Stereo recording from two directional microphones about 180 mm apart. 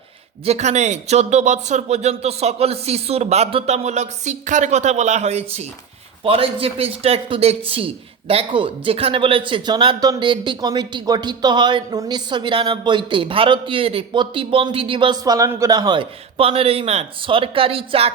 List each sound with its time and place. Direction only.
0.4 s a man's voice: 40° right (ahead or behind)